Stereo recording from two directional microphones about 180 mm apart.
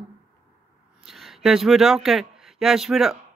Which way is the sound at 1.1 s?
Centre (ahead or behind).